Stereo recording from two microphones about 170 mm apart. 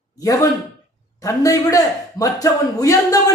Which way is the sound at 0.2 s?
20° left (ahead or behind).